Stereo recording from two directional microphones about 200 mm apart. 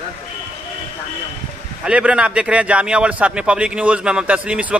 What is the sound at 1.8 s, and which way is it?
A man's voice, 5° right (ahead or behind).